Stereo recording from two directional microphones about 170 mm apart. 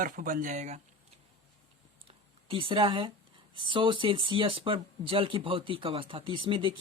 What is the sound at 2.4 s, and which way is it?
Speech, 30° right (ahead or behind).